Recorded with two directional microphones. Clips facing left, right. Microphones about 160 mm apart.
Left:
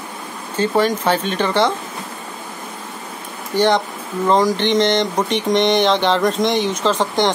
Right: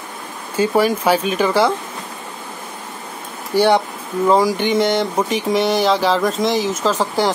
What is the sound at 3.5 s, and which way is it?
Speech, 10° right (ahead or behind).